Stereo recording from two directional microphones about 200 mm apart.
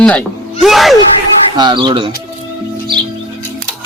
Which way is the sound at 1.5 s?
20° right (ahead or behind).